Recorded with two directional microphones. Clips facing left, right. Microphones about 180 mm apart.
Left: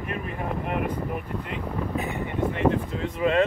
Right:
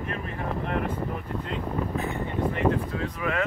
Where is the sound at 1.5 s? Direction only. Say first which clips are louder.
Right 1 dB; 15° left (ahead or behind).